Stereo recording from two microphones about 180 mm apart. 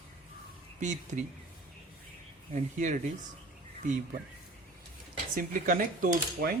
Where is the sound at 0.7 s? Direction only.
40° right (ahead or behind).